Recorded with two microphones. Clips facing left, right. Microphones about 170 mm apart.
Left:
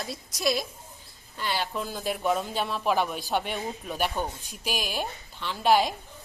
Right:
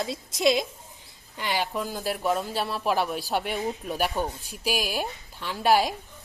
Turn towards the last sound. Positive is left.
turn(degrees=-10)  # may be behind; listen again after turning